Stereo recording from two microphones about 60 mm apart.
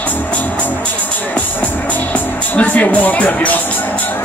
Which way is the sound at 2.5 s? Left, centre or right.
Left.